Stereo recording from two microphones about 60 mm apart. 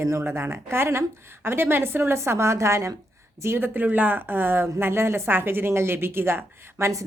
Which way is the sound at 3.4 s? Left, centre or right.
Right.